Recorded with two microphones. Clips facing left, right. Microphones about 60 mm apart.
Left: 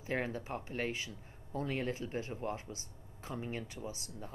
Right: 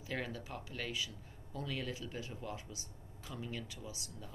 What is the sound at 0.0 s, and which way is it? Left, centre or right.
Speech, left.